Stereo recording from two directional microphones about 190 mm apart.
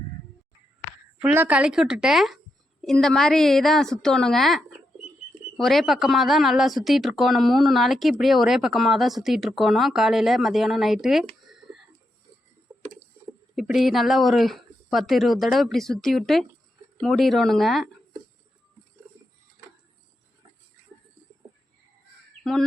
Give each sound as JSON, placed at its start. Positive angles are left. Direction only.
{"t": 1.2, "sound": "speech", "side_deg": -10}
{"t": 12.7, "sound": "a sound", "side_deg": -15}
{"t": 13.6, "sound": "speech", "side_deg": 0}
{"t": 22.5, "sound": "speech", "side_deg": 0}